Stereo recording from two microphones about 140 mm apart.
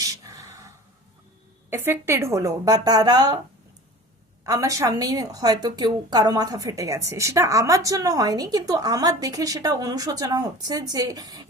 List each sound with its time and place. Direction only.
0.0 s a sound: 20° right (ahead or behind)
1.7 s a woman's voice: 15° right (ahead or behind)
4.4 s a woman's voice: 25° right (ahead or behind)